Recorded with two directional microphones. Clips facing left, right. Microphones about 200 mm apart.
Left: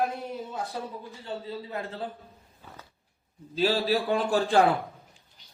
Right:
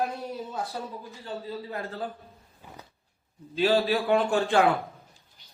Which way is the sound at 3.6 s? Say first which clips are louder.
Right 1 dB; 40° left (ahead or behind).